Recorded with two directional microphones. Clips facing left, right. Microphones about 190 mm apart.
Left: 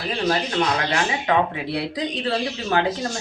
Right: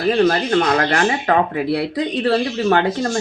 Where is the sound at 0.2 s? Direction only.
55° right (ahead or behind).